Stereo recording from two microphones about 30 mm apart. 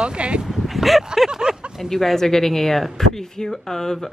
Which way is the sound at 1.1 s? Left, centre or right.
Centre.